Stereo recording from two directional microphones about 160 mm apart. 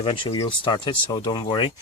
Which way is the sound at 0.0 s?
35° left (ahead or behind).